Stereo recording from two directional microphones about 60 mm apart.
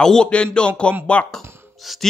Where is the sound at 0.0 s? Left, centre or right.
Centre.